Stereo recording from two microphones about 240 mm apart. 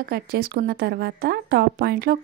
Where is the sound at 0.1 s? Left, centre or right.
Right.